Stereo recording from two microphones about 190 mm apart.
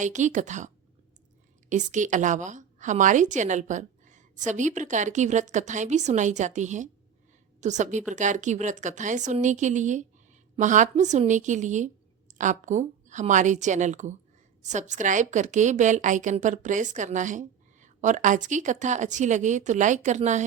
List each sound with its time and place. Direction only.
0.0 s a woman's voice: 40° right (ahead or behind)
1.7 s a woman's voice: 40° right (ahead or behind)